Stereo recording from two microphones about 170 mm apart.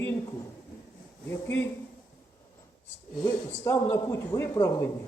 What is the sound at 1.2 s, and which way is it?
Speech, 15° left (ahead or behind).